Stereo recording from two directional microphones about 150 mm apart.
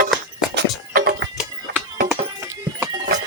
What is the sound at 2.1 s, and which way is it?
Clip-clop, 20° right (ahead or behind).